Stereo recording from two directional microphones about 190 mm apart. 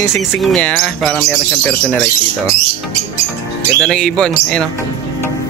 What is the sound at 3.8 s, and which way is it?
Speech, 5° left (ahead or behind).